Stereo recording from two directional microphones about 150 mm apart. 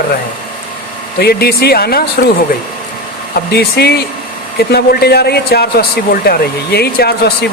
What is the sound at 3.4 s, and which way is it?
A man's voice, 90° left.